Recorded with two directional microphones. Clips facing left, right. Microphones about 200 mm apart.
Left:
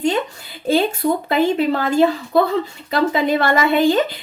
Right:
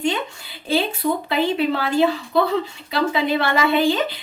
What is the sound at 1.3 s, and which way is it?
Speech, 45° left (ahead or behind).